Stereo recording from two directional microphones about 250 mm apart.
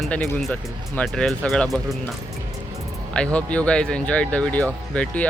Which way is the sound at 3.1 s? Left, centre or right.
Centre.